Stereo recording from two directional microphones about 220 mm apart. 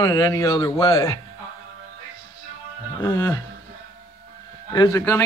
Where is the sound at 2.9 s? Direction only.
10° left (ahead or behind).